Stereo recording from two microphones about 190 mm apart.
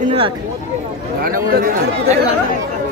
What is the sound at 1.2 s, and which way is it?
Speech, 50° right (ahead or behind).